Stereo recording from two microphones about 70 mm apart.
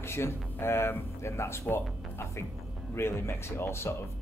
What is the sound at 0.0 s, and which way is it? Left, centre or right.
Speech, left.